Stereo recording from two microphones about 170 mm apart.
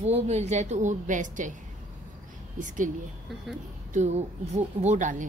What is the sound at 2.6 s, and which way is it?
Speech, 50° right (ahead or behind).